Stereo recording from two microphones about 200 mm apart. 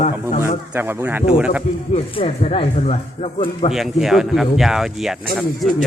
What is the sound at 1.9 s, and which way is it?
Speech, 30° left (ahead or behind).